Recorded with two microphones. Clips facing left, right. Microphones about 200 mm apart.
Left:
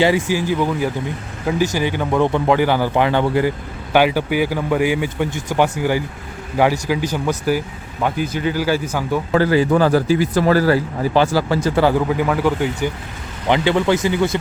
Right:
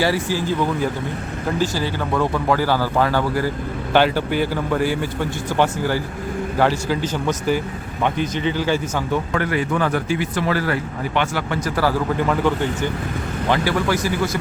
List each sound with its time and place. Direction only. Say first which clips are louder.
0.0 s a man's voice: left 4 dB; 15° left (ahead or behind)
3.9 s a man's voice: left 2 dB; 10° left (ahead or behind)
9.3 s a man's voice: left 11 dB; 30° left (ahead or behind)
12.0 s a man's voice: left 2 dB; 5° left (ahead or behind)
13.5 s speech: left 4 dB; 20° left (ahead or behind)